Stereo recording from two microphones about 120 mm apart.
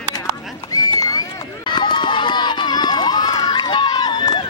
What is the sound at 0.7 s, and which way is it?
Run, 30° left (ahead or behind).